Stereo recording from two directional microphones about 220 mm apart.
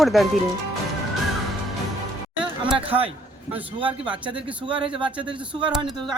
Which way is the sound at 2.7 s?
25° right (ahead or behind).